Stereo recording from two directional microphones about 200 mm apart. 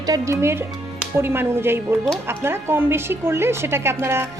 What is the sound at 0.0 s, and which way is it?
Speech, 15° right (ahead or behind).